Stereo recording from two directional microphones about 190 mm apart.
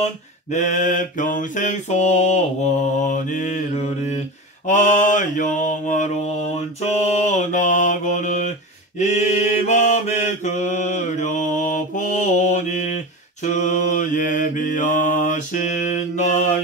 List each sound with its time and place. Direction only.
0.0 s mantra: 40° left (ahead or behind)